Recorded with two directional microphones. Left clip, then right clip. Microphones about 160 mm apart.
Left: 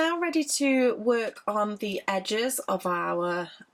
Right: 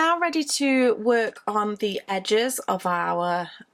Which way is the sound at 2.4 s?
35° right (ahead or behind).